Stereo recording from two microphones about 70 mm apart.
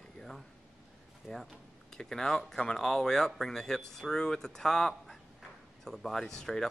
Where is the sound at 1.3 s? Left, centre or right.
Centre.